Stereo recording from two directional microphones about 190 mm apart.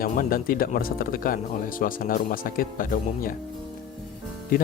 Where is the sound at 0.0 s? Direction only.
50° left (ahead or behind).